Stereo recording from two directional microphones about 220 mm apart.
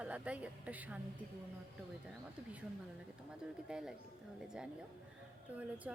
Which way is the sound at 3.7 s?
5° right (ahead or behind).